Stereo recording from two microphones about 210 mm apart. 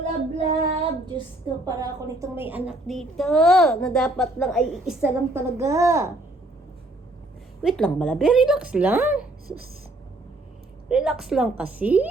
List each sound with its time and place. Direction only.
0.3 s child singing: 30° right (ahead or behind)
1.6 s a woman's voice: 15° right (ahead or behind)
2.6 s a woman's voice: centre (ahead or behind)
7.6 s a woman's voice: centre (ahead or behind)
10.8 s a woman's voice: 5° right (ahead or behind)